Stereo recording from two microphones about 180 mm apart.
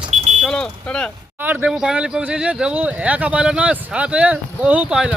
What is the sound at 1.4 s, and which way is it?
Speech, 10° right (ahead or behind).